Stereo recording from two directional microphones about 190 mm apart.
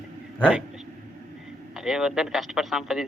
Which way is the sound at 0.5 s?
5° right (ahead or behind).